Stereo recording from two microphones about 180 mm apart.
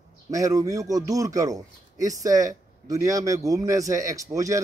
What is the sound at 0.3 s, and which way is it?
A man's voice, 20° right (ahead or behind).